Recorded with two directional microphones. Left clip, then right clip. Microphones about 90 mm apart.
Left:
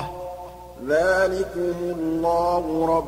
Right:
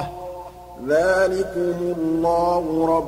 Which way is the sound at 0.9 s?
25° right (ahead or behind).